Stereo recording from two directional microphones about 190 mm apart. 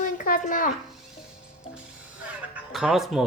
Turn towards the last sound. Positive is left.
turn(degrees=0)  # may be behind; listen again after turning